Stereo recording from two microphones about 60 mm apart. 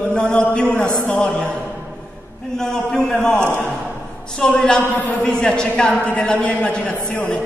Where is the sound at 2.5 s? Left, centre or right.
Centre.